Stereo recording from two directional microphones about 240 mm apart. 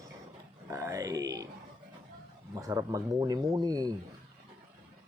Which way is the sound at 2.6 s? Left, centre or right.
Centre.